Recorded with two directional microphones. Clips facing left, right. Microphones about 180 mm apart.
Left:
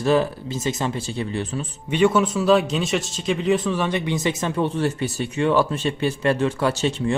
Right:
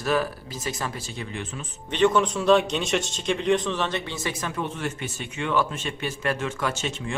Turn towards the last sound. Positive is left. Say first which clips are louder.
# left 8 dB
turn(degrees=35)  # may be behind; listen again after turning